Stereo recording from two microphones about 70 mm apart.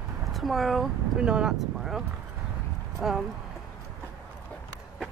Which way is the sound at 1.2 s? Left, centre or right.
Centre.